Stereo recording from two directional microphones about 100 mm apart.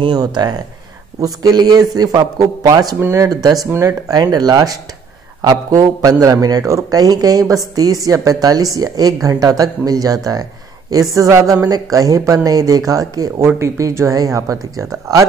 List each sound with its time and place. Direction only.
0.1 s a man's voice: 45° right (ahead or behind)